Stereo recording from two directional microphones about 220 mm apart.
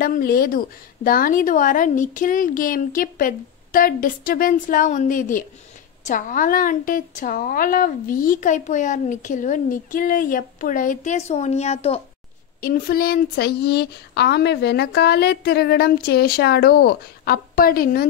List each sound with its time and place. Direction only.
0.0 s a woman's voice: 40° left (ahead or behind)
12.5 s speech: 40° left (ahead or behind)